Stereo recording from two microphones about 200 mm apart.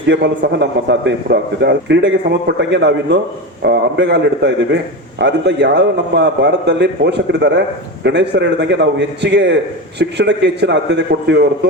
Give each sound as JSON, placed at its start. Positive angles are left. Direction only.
{"t": 0.1, "sound": "a man's voice", "side_deg": -70}
{"t": 0.4, "sound": "a man's voice", "side_deg": -60}